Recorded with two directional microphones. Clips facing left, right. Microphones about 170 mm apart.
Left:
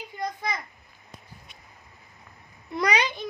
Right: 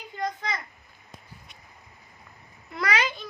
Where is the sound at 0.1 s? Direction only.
10° left (ahead or behind).